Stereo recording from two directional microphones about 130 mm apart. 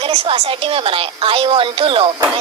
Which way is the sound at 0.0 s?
45° right (ahead or behind).